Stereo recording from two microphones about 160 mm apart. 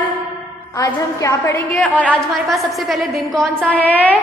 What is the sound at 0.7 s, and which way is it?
Speech, 20° left (ahead or behind).